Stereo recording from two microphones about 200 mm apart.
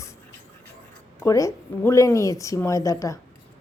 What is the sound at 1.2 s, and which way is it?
A woman's voice, 15° left (ahead or behind).